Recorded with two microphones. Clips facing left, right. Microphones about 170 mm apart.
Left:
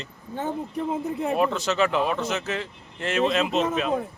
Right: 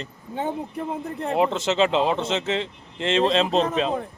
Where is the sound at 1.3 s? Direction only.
20° right (ahead or behind).